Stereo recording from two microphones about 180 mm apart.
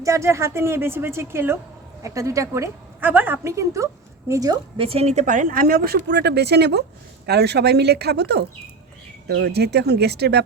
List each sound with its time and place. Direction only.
0.0 s a woman's voice: 15° right (ahead or behind)
4.9 s a woman's voice: 35° right (ahead or behind); by 10.4 s 65° right (ahead or behind)